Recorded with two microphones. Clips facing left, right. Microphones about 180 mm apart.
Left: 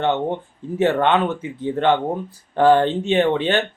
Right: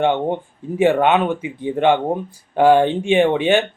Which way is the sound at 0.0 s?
10° right (ahead or behind).